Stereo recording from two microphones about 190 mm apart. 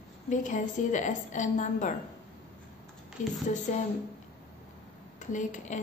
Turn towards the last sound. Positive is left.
turn(degrees=40)  # may be behind; listen again after turning